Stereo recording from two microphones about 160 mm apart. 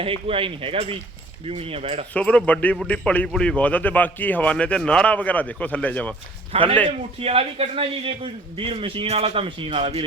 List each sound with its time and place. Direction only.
0.0 s a man's voice: 35° right (ahead or behind)
2.1 s a man's voice: 10° left (ahead or behind)
6.8 s a man's voice: 35° right (ahead or behind)